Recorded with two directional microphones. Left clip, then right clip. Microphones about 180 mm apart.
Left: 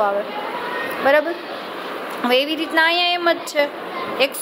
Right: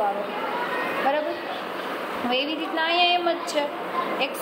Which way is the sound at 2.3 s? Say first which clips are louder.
Left 9 dB; 45° left (ahead or behind).